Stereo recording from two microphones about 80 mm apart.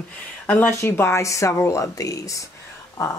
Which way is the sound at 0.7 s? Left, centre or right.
Left.